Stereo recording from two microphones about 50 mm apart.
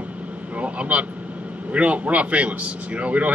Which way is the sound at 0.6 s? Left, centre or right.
Right.